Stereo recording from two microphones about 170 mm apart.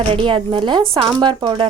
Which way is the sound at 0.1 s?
30° right (ahead or behind).